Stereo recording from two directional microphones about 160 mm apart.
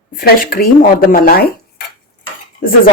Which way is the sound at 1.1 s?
70° left (ahead or behind).